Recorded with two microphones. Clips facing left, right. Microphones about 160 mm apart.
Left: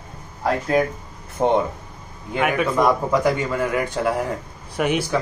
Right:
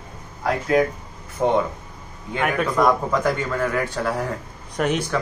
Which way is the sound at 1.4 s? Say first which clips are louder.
Left 1 dB; 25° left (ahead or behind).